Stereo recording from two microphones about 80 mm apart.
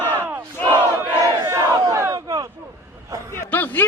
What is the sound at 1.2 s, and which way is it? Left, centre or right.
Crowd, right.